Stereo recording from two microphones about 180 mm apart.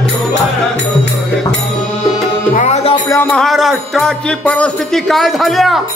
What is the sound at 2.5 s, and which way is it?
Music, 40° left (ahead or behind).